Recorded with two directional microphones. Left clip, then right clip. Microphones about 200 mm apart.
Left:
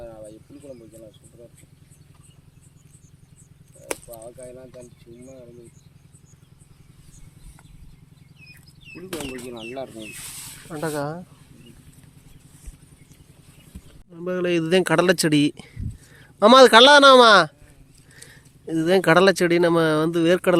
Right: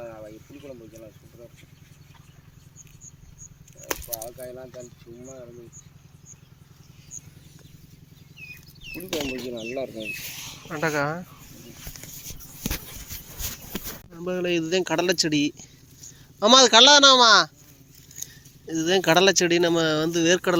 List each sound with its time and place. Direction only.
0.0 s a sound: 5° left (ahead or behind)
0.6 s a sound: 10° right (ahead or behind)
4.1 s speech: 10° left (ahead or behind)
9.2 s speech: 40° left (ahead or behind)
10.7 s speech: 5° left (ahead or behind)
14.1 s speech: 25° left (ahead or behind)